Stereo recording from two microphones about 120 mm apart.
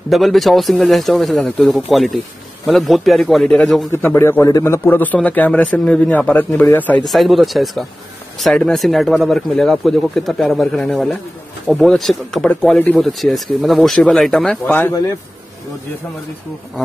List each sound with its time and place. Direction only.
0.1 s speech: centre (ahead or behind)
3.9 s a man's voice: 20° left (ahead or behind)
7.1 s speech: centre (ahead or behind)
14.7 s a man's voice: 20° left (ahead or behind)